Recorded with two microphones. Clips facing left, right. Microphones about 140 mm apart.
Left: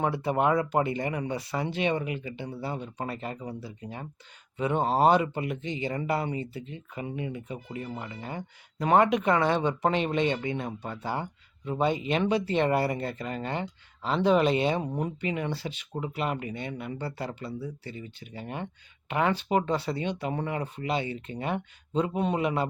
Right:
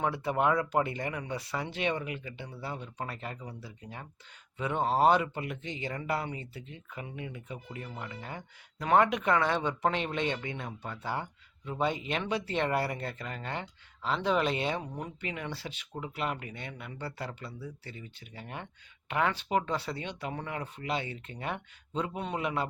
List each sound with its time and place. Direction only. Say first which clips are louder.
0.0 s speech: left 3 dB; 20° left (ahead or behind)
1.5 s speech: left 4 dB; 5° left (ahead or behind)
2.6 s speech: left 3 dB; 20° left (ahead or behind); by 5.9 s 5° left (ahead or behind)
5.9 s speech: left 4 dB; 15° left (ahead or behind)
11.9 s speech: left 8 dB; 5° left (ahead or behind)
12.7 s speech: left 5 dB; 15° left (ahead or behind)
15.5 s speech: left 6 dB; centre (ahead or behind)
15.9 s speech: left 4 dB; 15° left (ahead or behind)
18.3 s speech: left 6 dB; 10° left (ahead or behind)
19.4 s speech: left 4 dB; 5° left (ahead or behind)
19.9 s speech: left 6 dB; 20° left (ahead or behind)
20.7 s speech: left 5 dB; 5° left (ahead or behind)